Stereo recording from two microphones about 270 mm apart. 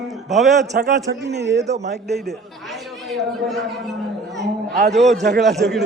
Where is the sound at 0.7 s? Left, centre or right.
Right.